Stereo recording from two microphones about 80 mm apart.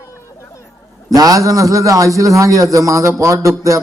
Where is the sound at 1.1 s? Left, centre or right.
Right.